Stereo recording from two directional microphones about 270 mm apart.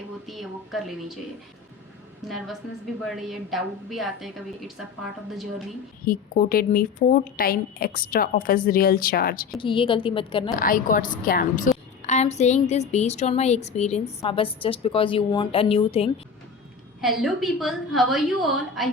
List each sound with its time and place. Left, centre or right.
0.3 s a woman's voice: centre
2.2 s a woman's voice: centre
6.1 s speech: left
9.6 s a woman's voice: centre
10.6 s a woman's voice: left
17.0 s a woman's voice: centre